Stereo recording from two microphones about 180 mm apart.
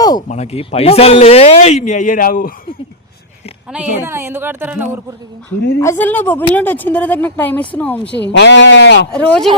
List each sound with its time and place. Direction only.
0.0 s speech: 20° left (ahead or behind)
0.3 s speech: 35° left (ahead or behind)
3.7 s speech: 10° right (ahead or behind)
5.8 s speech: 15° left (ahead or behind)
8.2 s speech: 75° left (ahead or behind)
9.1 s speech: 5° left (ahead or behind)